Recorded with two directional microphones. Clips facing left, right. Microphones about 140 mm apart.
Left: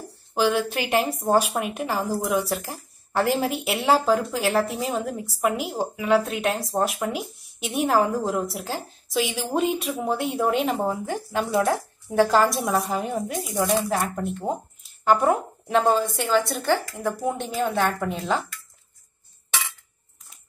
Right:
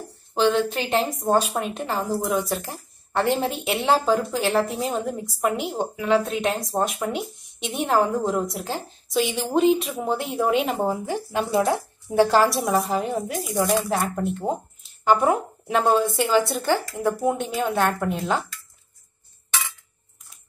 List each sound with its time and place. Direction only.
0.3 s a woman's voice: 10° left (ahead or behind)